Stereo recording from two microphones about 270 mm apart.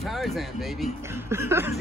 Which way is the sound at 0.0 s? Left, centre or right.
Centre.